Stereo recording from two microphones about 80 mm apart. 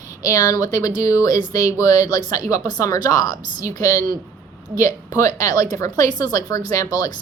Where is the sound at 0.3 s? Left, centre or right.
Left.